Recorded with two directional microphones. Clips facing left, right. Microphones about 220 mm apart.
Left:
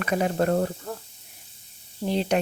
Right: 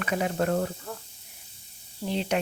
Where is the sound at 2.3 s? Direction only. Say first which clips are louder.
Left 3 dB; 40° left (ahead or behind).